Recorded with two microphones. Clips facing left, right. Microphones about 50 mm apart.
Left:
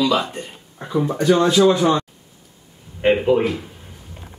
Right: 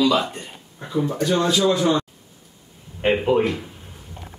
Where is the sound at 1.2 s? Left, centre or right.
Left.